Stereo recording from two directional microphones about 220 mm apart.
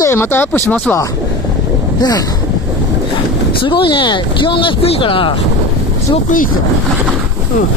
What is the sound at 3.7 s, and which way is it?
Speech, 20° left (ahead or behind).